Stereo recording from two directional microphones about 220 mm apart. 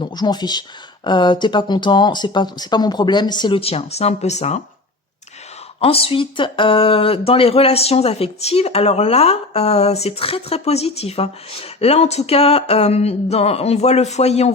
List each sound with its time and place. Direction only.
0.0 s speech: 20° left (ahead or behind)
5.8 s speech: 25° left (ahead or behind)